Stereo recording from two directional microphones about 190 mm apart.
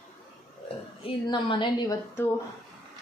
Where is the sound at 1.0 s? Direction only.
25° left (ahead or behind).